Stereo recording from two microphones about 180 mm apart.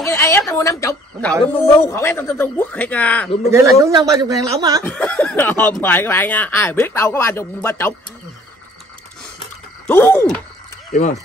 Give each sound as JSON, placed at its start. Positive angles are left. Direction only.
{"t": 0.0, "sound": "a sound", "side_deg": 15}
{"t": 1.4, "sound": "speech", "side_deg": 10}
{"t": 3.5, "sound": "a man's voice", "side_deg": -15}
{"t": 4.8, "sound": "speech", "side_deg": 10}
{"t": 9.8, "sound": "speech", "side_deg": 10}
{"t": 10.9, "sound": "speech", "side_deg": 40}